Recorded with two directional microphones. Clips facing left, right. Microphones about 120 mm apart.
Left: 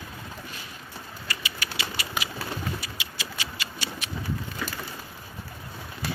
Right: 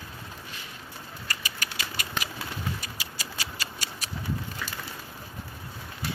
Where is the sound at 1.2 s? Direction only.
45° right (ahead or behind).